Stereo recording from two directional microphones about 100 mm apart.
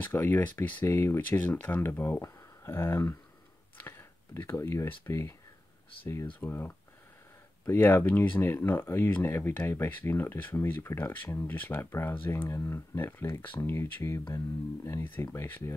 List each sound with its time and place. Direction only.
0.0 s speech: 20° left (ahead or behind)
3.7 s a sound: 25° left (ahead or behind)
4.8 s speech: 25° left (ahead or behind)
6.4 s speech: 20° left (ahead or behind)
15.3 s speech: 25° left (ahead or behind)